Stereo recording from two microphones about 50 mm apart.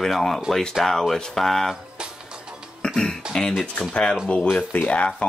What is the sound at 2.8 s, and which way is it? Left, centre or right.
Beatboxing, centre.